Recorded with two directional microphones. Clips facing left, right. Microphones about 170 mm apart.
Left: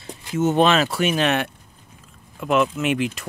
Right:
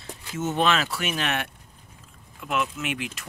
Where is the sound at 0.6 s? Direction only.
25° left (ahead or behind).